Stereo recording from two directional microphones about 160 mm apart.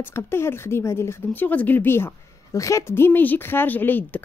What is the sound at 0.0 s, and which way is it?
Speech, 15° left (ahead or behind).